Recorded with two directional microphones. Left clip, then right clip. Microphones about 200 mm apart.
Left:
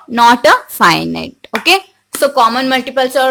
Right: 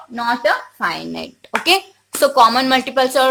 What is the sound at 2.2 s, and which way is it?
A woman's voice, 10° left (ahead or behind).